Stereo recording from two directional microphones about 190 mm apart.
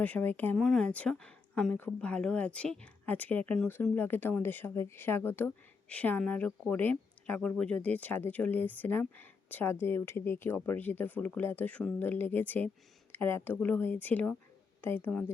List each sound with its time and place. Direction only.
0.0 s speech: 10° left (ahead or behind)